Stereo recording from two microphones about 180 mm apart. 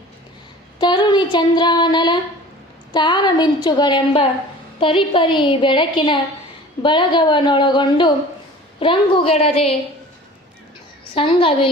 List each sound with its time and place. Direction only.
0.8 s a woman's voice: 25° left (ahead or behind)
11.1 s a woman's voice: 30° left (ahead or behind)